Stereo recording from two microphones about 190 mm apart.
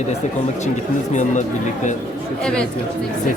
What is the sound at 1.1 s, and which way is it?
Speech, 40° left (ahead or behind).